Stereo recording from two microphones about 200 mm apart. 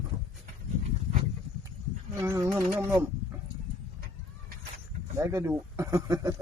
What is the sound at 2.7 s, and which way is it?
Speech, 15° right (ahead or behind).